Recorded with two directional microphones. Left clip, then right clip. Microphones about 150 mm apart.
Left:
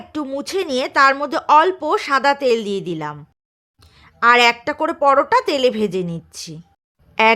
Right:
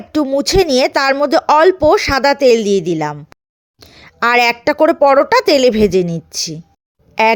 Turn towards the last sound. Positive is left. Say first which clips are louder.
# right 2 dB
turn(degrees=-30)  # may be behind; listen again after turning